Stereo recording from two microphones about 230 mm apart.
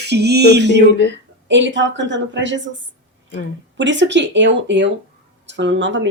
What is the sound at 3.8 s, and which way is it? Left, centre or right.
Speech, right.